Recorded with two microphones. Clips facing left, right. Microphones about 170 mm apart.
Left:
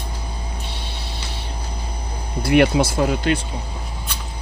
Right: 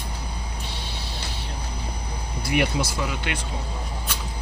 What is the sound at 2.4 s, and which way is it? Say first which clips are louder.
Speech: left 9 dB; 60° left (ahead or behind).